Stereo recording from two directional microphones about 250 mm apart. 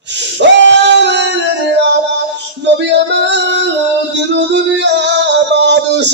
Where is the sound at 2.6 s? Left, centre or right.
Right.